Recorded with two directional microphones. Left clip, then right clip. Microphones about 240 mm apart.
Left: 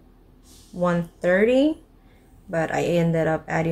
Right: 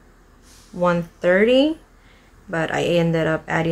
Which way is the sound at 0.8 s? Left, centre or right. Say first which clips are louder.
Right 4 dB; centre.